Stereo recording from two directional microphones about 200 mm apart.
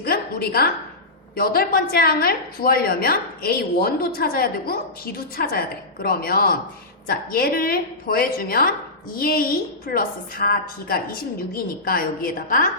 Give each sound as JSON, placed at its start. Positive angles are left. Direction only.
{"t": 0.0, "sound": "a woman's voice", "side_deg": 50}